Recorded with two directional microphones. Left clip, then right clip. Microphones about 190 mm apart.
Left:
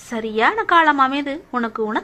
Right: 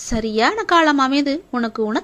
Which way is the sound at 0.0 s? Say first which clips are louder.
Even; 45° right (ahead or behind).